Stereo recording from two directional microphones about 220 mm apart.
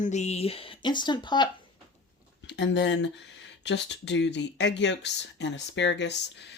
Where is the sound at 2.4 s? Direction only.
55° left (ahead or behind).